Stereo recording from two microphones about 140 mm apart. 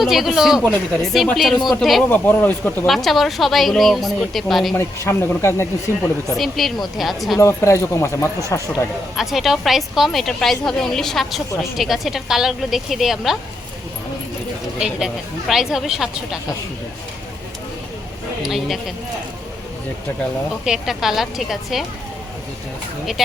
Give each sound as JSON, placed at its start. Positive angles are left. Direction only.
{"t": 0.0, "sound": "a woman's voice", "side_deg": 0}
{"t": 2.0, "sound": "speech", "side_deg": 15}
{"t": 2.8, "sound": "a woman's voice", "side_deg": 0}
{"t": 4.7, "sound": "speech", "side_deg": 20}
{"t": 6.3, "sound": "a woman's voice", "side_deg": 0}
{"t": 7.3, "sound": "speech", "side_deg": 20}
{"t": 9.1, "sound": "a woman's voice", "side_deg": 0}
{"t": 14.8, "sound": "a woman's voice", "side_deg": -5}
{"t": 18.4, "sound": "a woman's voice", "side_deg": 0}
{"t": 20.7, "sound": "a woman's voice", "side_deg": -5}